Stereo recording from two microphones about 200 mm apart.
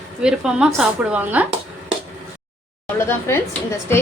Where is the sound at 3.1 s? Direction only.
10° left (ahead or behind).